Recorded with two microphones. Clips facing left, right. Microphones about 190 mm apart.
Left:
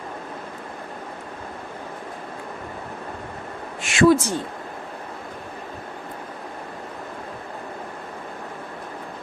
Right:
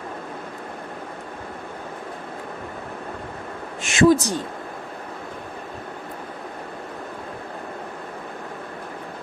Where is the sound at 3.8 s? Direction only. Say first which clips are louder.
Right 1 dB; 45° right (ahead or behind).